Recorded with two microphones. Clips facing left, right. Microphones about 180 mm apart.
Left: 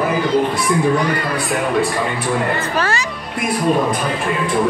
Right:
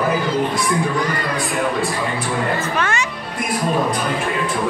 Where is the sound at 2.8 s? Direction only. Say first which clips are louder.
Left 2 dB; 35° left (ahead or behind).